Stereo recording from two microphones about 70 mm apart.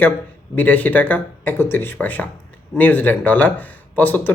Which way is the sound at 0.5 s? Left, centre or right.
Left.